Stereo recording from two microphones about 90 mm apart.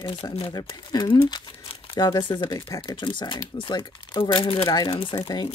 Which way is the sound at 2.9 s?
55° left (ahead or behind).